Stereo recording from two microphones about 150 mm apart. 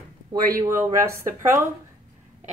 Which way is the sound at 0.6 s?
20° right (ahead or behind).